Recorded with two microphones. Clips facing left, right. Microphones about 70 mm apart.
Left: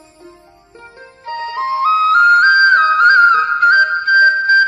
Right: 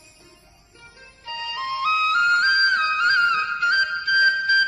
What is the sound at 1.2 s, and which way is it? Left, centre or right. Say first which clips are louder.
Music: left 9 dB; left.